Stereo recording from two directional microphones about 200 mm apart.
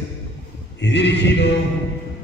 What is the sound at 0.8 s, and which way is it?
Music, 60° left (ahead or behind).